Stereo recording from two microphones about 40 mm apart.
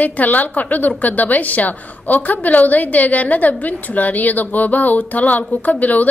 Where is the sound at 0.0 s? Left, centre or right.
Left.